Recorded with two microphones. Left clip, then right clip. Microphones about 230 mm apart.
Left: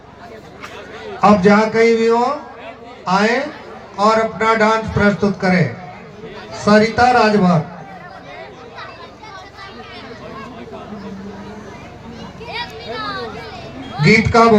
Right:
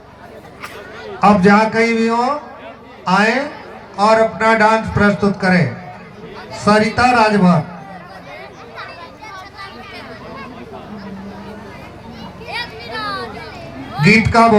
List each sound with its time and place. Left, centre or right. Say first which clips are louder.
1.2 s a man's voice: right 1 dB; right
6.7 s a man's voice: left 1 dB; right
12.5 s a sound: right 1 dB; right
13.9 s a man's voice: even; right